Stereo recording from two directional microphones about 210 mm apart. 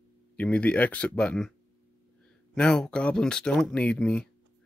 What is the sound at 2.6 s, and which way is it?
Speech, 5° left (ahead or behind).